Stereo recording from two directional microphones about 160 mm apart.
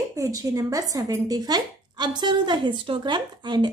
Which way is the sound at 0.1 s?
20° right (ahead or behind).